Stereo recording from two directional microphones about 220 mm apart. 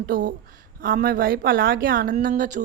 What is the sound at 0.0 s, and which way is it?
A woman's voice, 40° right (ahead or behind).